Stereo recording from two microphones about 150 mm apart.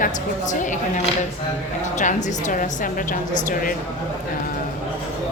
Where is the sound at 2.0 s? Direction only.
55° left (ahead or behind).